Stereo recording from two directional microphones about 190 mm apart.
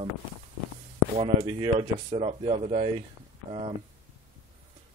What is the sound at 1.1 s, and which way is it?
Speech, 30° right (ahead or behind).